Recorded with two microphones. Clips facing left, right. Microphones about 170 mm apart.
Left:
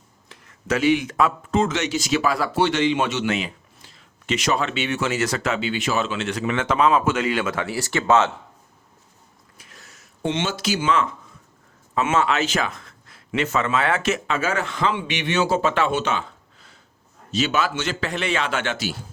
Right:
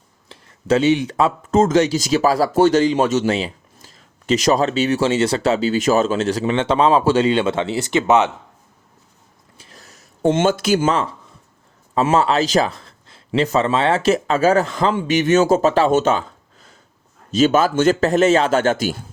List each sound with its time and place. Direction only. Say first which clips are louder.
0.3 s speech: right 7 dB; 30° right (ahead or behind)
9.6 s a sound: right 4 dB; 35° right (ahead or behind)
11.9 s a man's voice: right 5 dB; 35° right (ahead or behind)